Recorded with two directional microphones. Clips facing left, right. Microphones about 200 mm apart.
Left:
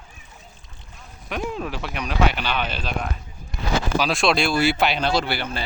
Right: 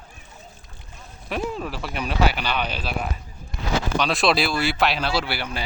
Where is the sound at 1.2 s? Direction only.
Centre (ahead or behind).